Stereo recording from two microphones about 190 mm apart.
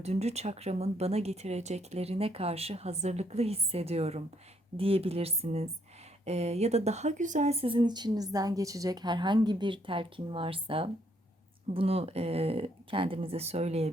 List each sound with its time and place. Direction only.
0.0 s speech: 35° right (ahead or behind)